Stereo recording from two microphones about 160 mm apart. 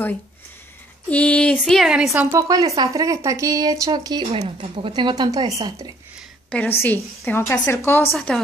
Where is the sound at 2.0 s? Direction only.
20° right (ahead or behind).